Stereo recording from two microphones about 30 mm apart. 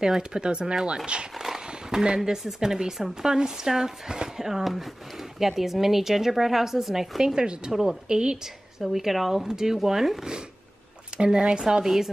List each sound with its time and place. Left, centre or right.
0.0 s speech: right
2.0 s a woman's voice: right
7.3 s speech: right
7.7 s a woman's voice: centre
8.1 s speech: right
8.8 s a woman's voice: centre
9.5 s a woman's voice: centre
11.8 s a woman's voice: centre